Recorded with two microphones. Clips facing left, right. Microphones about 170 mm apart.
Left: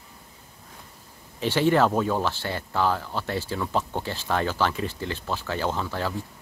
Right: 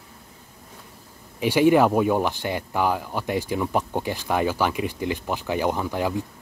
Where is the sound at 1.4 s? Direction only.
10° right (ahead or behind).